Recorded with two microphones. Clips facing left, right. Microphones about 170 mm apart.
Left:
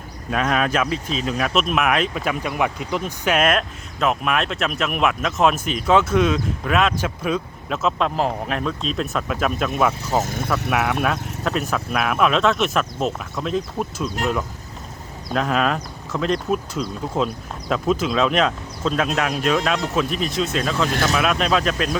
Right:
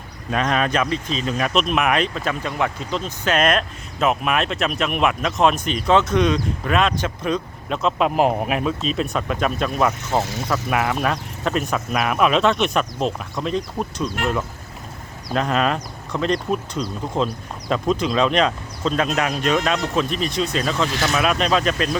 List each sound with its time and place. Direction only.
0.3 s speech: 5° left (ahead or behind)
8.0 s speech: 15° right (ahead or behind); by 9.9 s 5° left (ahead or behind)
10.2 s speech: 50° left (ahead or behind)
10.7 s speech: centre (ahead or behind)
15.3 s speech: centre (ahead or behind)